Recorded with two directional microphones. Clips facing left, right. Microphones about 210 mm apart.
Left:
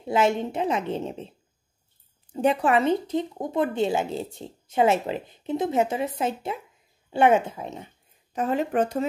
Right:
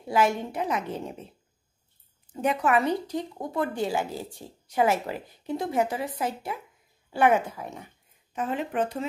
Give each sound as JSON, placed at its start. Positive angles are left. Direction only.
{"t": 0.0, "sound": "a woman's voice", "side_deg": 25}
{"t": 2.3, "sound": "a woman's voice", "side_deg": 30}
{"t": 8.3, "sound": "a woman's voice", "side_deg": 40}